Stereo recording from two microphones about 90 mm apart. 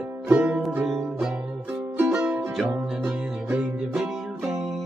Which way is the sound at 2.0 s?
25° right (ahead or behind).